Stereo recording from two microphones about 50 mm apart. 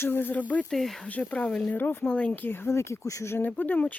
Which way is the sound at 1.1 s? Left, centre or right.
Left.